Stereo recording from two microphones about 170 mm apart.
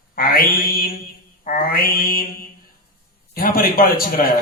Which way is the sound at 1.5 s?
55° left (ahead or behind).